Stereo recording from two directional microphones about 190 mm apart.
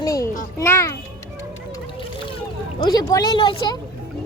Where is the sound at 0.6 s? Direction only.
15° left (ahead or behind).